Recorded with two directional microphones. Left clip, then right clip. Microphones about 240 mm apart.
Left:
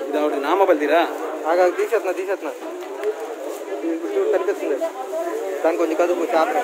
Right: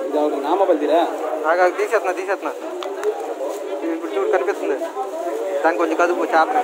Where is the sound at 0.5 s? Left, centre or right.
Left.